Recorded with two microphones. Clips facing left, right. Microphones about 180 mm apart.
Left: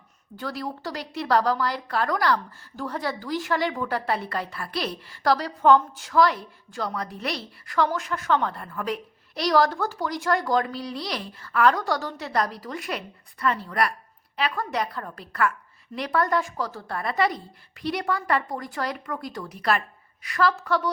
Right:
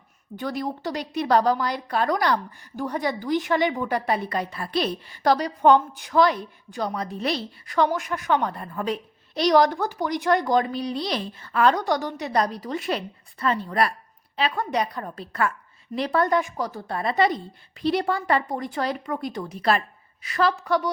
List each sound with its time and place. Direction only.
0.3 s a woman's voice: 20° right (ahead or behind)